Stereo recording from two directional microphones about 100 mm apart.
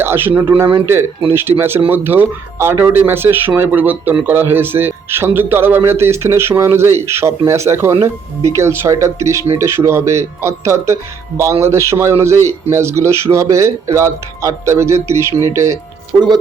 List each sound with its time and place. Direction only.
0.0 s speech: 25° right (ahead or behind)